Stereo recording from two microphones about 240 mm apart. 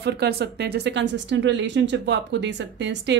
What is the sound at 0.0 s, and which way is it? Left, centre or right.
A woman's voice, right.